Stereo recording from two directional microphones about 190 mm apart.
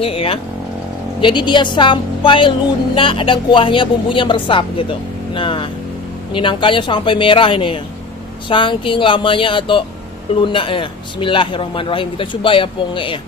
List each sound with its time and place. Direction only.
0.0 s a woman's voice: 30° left (ahead or behind)